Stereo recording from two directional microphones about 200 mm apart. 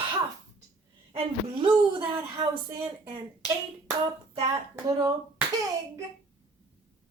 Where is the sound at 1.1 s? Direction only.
25° right (ahead or behind).